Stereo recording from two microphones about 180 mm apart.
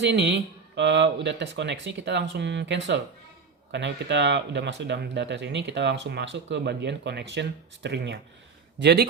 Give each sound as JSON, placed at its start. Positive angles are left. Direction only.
{"t": 0.0, "sound": "speech", "side_deg": -75}